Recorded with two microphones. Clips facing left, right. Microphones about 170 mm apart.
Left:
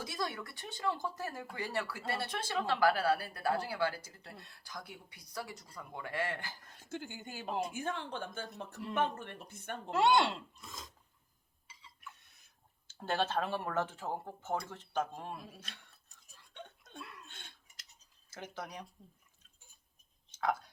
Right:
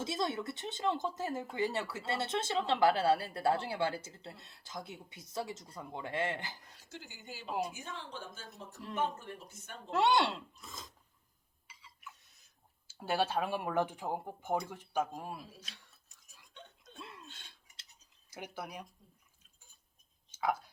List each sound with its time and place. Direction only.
0.0 s speech: 25° right (ahead or behind)
6.7 s speech: 50° left (ahead or behind)
9.9 s speech: centre (ahead or behind)
12.9 s speech: 10° right (ahead or behind)
17.0 s a sound: 25° right (ahead or behind)
17.2 s a sound: 55° left (ahead or behind)
18.3 s speech: 10° right (ahead or behind)
20.4 s speech: 5° right (ahead or behind)